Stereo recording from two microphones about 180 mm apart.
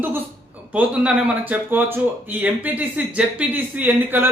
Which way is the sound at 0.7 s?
5° right (ahead or behind).